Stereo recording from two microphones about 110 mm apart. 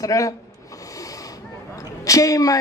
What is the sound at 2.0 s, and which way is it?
Speech, 30° left (ahead or behind).